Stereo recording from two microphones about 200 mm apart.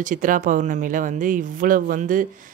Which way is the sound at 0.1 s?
40° right (ahead or behind).